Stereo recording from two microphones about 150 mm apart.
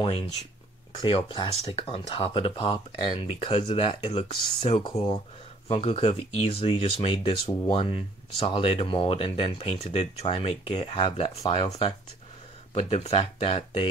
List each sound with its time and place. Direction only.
0.9 s speech: 35° left (ahead or behind)